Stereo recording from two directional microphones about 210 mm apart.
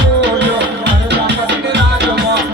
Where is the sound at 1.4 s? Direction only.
55° right (ahead or behind).